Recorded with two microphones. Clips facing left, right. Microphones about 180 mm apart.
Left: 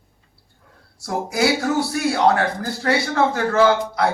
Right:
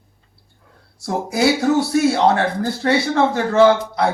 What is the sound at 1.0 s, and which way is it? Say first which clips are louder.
Speech: right 2 dB; 20° right (ahead or behind).